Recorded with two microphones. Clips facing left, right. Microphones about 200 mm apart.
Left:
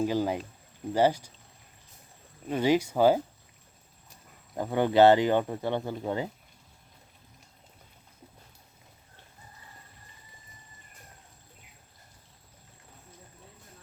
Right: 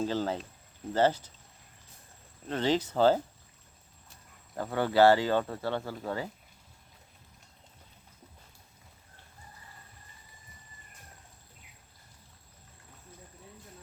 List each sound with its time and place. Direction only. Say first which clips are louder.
0.0 s speech: left 3 dB; 15° left (ahead or behind)
2.5 s speech: left 4 dB; 10° left (ahead or behind)
4.5 s speech: left 3 dB; 20° left (ahead or behind)